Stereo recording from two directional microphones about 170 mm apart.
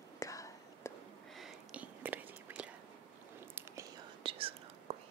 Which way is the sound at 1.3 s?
5° right (ahead or behind).